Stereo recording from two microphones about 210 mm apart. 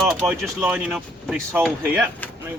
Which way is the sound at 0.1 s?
Centre (ahead or behind).